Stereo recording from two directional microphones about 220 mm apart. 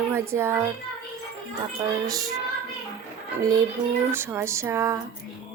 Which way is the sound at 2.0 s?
15° right (ahead or behind).